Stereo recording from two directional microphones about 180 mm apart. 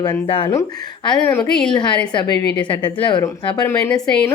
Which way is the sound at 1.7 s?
25° left (ahead or behind).